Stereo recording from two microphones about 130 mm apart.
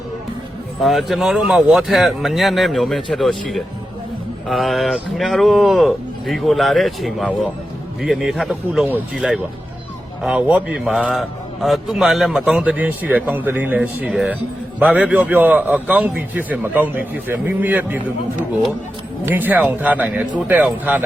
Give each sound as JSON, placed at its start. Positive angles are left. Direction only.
{"t": 0.8, "sound": "a man's voice", "side_deg": 0}
{"t": 19.2, "sound": "a man's voice", "side_deg": -15}